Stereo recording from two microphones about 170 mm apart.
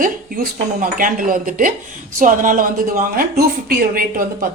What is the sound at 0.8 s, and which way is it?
Speech, 55° right (ahead or behind).